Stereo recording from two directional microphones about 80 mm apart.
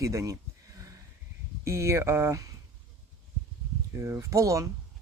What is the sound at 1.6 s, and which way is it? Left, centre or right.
Speech, right.